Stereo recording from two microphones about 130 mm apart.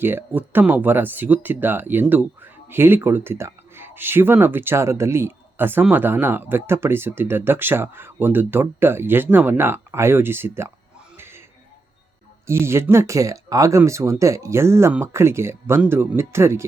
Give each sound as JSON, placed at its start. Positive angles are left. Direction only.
{"t": 0.0, "sound": "speech", "side_deg": -15}
{"t": 11.2, "sound": "a sound", "side_deg": -20}
{"t": 12.5, "sound": "speech", "side_deg": -20}